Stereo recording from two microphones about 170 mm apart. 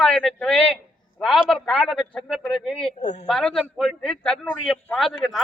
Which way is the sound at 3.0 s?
45° left (ahead or behind).